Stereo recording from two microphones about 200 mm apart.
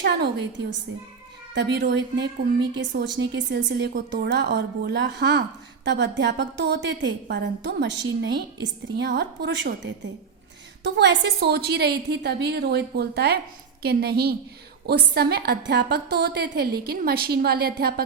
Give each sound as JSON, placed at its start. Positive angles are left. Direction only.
{"t": 0.0, "sound": "a woman's voice", "side_deg": -60}